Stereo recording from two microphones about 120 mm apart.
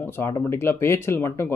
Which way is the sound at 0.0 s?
20° left (ahead or behind).